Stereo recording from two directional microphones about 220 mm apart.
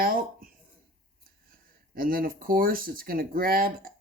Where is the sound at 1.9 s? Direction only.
40° right (ahead or behind).